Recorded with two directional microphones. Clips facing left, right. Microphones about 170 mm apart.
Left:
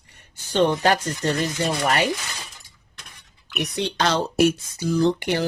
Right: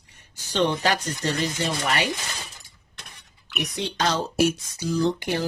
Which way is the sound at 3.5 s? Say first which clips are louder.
Left 3 dB; 65° left (ahead or behind).